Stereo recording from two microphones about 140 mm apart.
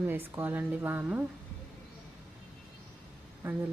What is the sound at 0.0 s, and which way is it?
Speech, 15° right (ahead or behind).